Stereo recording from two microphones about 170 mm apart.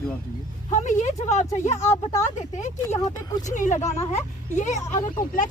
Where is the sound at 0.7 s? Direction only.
45° left (ahead or behind).